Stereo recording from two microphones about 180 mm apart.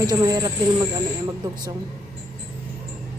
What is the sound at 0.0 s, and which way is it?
Speech, 20° right (ahead or behind).